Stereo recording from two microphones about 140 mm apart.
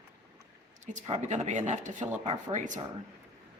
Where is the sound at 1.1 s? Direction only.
55° right (ahead or behind).